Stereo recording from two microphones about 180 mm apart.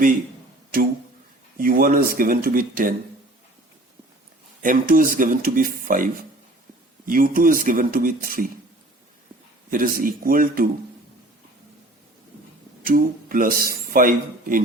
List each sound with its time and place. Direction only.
1.5 s speech: 50° right (ahead or behind)
4.6 s speech: 50° right (ahead or behind)
9.6 s speech: 50° right (ahead or behind)
12.8 s speech: 50° right (ahead or behind)